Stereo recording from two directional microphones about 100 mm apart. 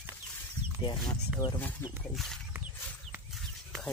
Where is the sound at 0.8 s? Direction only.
50° left (ahead or behind).